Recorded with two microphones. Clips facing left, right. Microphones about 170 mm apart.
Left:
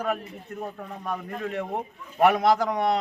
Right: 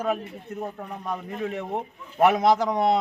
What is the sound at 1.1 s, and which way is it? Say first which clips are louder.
A man's voice: even; 15° right (ahead or behind).